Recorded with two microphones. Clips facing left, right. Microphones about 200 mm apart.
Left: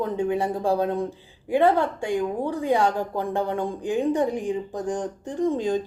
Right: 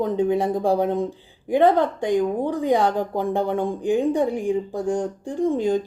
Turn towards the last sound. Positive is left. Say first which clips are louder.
# right 3 dB
turn(degrees=-15)  # may be behind; listen again after turning